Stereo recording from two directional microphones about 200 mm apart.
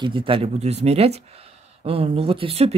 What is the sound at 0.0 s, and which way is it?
Speech, 25° right (ahead or behind).